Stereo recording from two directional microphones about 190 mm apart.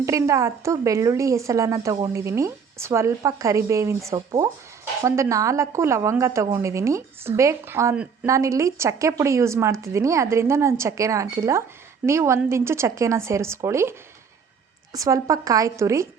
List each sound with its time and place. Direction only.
0.0 s a woman's voice: 15° right (ahead or behind)
14.9 s a woman's voice: 20° right (ahead or behind)